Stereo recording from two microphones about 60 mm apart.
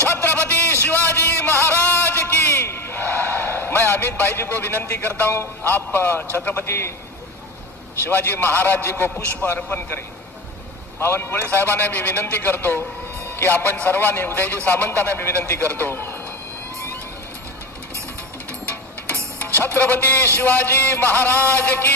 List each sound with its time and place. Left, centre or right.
0.1 s a sound: left
2.5 s a sound: left
6.3 s a man's voice: left
6.7 s a man's voice: left
8.1 s a man's voice: left
11.0 s a man's voice: left
19.5 s a man's voice: left